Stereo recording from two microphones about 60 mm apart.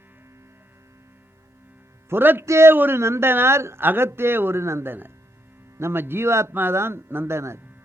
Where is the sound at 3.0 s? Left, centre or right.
Right.